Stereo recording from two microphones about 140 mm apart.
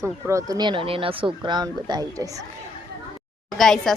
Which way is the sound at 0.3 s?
25° right (ahead or behind).